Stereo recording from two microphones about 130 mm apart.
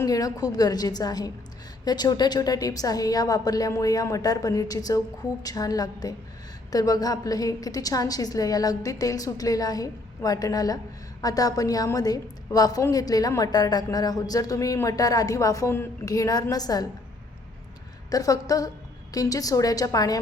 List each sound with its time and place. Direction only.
0.0 s a woman's voice: 25° left (ahead or behind)
18.1 s a woman's voice: 25° left (ahead or behind)